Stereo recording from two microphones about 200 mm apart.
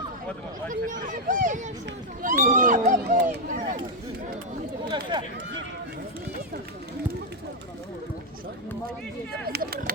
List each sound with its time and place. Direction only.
0.7 s speech: 40° right (ahead or behind)
4.9 s speech: 20° right (ahead or behind)
9.5 s speech: 50° right (ahead or behind)